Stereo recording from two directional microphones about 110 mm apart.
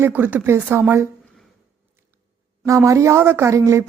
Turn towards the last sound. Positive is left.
turn(degrees=-25)  # may be behind; listen again after turning